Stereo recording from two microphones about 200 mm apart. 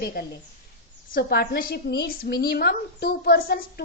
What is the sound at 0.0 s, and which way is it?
A woman's voice, 50° left (ahead or behind).